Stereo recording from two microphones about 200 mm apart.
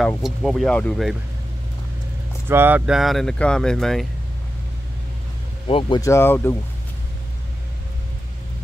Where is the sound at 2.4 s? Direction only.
10° right (ahead or behind).